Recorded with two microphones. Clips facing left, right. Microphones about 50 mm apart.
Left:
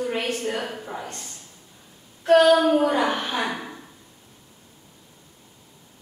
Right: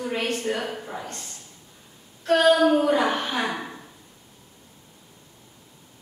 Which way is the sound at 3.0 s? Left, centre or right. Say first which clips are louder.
Even; centre.